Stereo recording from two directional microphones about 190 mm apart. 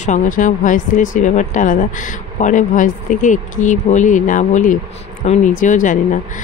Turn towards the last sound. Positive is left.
turn(degrees=45)  # may be behind; listen again after turning